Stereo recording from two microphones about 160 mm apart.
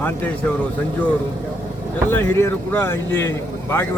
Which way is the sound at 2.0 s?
15° left (ahead or behind).